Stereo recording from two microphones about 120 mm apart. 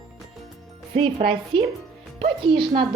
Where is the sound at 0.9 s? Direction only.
45° right (ahead or behind).